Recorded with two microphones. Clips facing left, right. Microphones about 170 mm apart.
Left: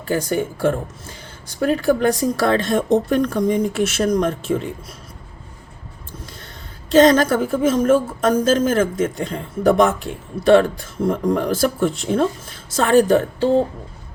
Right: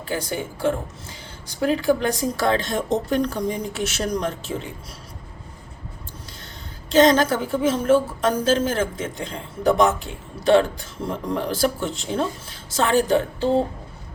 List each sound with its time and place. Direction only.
0.0 s a woman's voice: 45° left (ahead or behind)
6.9 s a woman's voice: 50° left (ahead or behind)